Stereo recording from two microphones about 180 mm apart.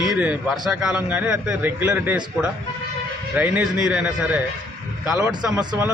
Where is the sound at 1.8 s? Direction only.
15° right (ahead or behind).